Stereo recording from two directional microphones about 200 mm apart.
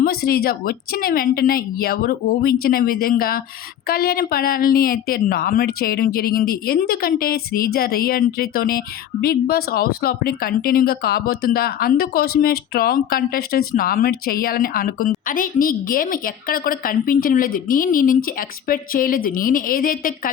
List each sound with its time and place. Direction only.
0.0 s speech: 50° left (ahead or behind)